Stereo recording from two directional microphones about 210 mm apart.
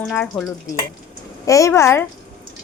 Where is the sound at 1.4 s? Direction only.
15° left (ahead or behind).